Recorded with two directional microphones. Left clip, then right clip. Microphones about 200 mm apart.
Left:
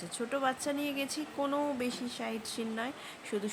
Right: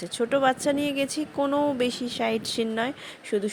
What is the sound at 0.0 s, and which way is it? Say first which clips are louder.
Speech: right 10 dB; 40° right (ahead or behind).